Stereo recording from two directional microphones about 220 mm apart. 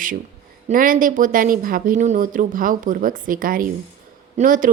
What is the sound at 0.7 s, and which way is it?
A woman's voice, 40° right (ahead or behind).